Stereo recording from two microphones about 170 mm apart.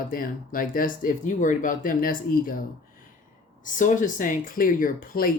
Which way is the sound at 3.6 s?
50° left (ahead or behind).